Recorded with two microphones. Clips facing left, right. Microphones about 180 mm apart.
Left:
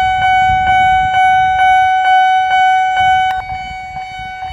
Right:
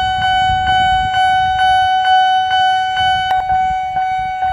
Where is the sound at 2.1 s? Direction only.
30° right (ahead or behind).